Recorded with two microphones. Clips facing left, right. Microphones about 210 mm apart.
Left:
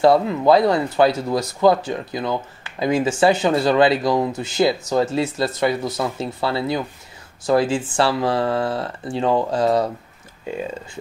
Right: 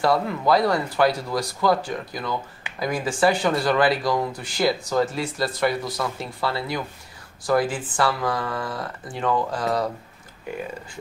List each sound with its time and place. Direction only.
0.0 s speech: 25° left (ahead or behind)